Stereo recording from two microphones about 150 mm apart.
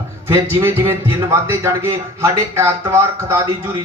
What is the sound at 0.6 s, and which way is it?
A man's voice, 15° right (ahead or behind).